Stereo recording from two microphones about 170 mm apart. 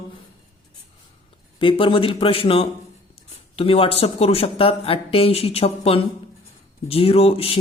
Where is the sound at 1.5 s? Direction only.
30° left (ahead or behind).